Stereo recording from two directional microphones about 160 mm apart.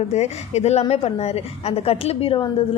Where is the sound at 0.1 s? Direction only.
45° left (ahead or behind).